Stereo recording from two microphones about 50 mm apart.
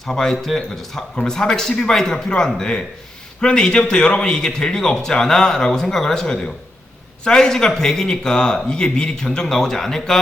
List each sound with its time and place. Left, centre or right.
0.0 s a man's voice: centre